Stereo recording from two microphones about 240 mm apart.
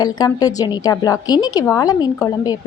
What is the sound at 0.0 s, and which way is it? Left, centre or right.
A woman's voice, centre.